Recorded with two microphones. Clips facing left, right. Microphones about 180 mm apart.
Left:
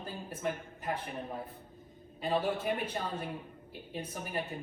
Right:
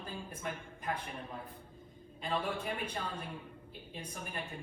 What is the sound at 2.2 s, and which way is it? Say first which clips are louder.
Speech: left 5 dB; 5° left (ahead or behind).